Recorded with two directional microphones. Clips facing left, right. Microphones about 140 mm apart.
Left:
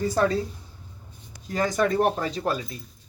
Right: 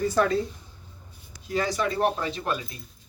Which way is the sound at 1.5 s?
45° left (ahead or behind).